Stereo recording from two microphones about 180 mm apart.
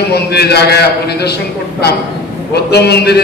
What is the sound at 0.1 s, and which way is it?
A man's voice, 65° left (ahead or behind).